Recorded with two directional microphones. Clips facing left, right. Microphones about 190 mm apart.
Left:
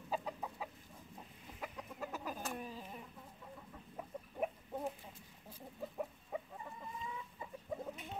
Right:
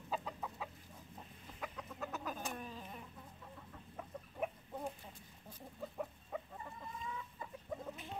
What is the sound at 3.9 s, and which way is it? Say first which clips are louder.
Chicken: left 2 dB; 5° left (ahead or behind).